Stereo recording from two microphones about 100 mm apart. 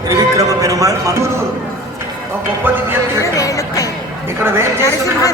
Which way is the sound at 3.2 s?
35° left (ahead or behind).